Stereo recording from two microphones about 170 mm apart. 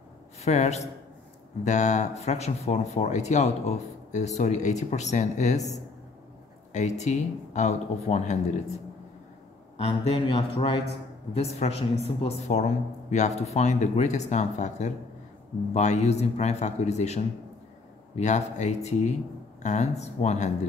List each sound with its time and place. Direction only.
0.4 s speech: 45° left (ahead or behind)
6.7 s speech: 45° left (ahead or behind)
9.8 s a man's voice: 35° left (ahead or behind)